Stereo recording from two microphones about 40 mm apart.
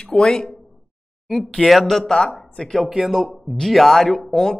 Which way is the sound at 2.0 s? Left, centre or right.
Left.